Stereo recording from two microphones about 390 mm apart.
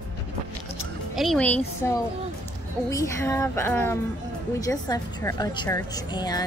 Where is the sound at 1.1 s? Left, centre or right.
Centre.